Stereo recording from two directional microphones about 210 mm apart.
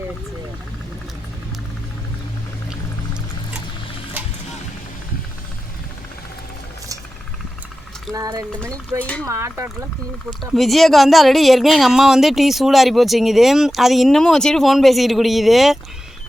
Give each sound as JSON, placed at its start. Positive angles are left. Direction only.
{"t": 8.1, "sound": "speech", "side_deg": -15}
{"t": 9.0, "sound": "speech", "side_deg": 5}
{"t": 9.2, "sound": "speech", "side_deg": -15}
{"t": 10.5, "sound": "speech", "side_deg": 0}